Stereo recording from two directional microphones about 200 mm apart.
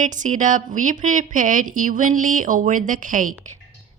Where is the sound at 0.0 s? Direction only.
40° right (ahead or behind).